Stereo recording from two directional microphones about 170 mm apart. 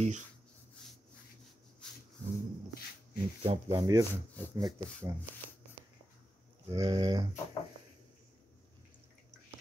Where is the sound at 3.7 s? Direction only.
20° right (ahead or behind).